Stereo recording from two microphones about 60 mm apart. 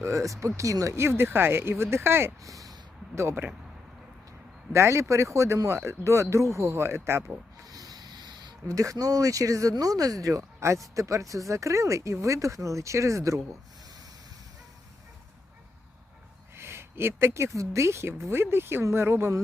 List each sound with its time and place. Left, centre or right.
0.0 s speech: right
0.9 s speech: right
2.4 s speech: right
3.2 s speech: right
4.7 s speech: right
7.7 s rub: right
8.6 s speech: right
16.6 s speech: right
18.3 s speech: right